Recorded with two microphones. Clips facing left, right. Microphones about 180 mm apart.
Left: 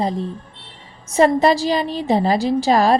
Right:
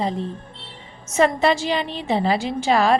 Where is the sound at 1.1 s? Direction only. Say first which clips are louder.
Left 4 dB; 40° left (ahead or behind).